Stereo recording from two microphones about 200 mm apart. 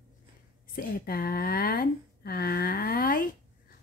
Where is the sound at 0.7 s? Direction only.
50° left (ahead or behind).